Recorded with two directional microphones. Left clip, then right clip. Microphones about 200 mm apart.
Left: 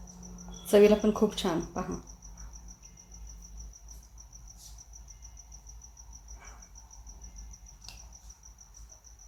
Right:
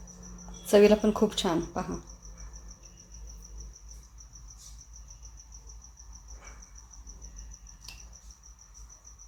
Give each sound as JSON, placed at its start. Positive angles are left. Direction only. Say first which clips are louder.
{"t": 0.7, "sound": "speech", "louder": "right 1 dB", "side_deg": -15}